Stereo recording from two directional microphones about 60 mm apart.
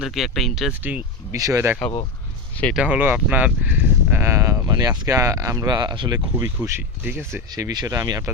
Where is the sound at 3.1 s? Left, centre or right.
Right.